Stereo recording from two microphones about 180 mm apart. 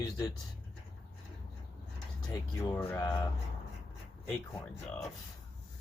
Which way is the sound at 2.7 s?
15° left (ahead or behind).